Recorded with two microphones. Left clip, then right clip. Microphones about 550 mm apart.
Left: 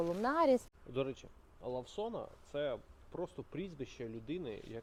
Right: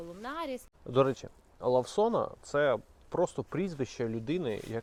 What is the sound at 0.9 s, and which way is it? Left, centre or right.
Speech, right.